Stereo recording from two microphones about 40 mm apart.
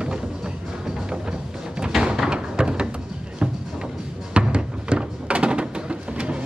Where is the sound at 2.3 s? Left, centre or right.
Right.